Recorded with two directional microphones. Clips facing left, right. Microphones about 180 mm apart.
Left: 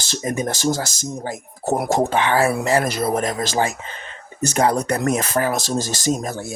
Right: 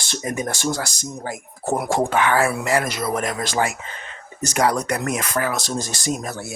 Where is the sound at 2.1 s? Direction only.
30° left (ahead or behind).